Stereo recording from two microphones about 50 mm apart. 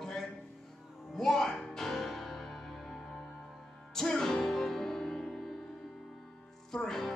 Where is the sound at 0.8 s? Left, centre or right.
Centre.